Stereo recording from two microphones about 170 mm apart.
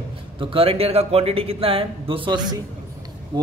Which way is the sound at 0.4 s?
30° right (ahead or behind).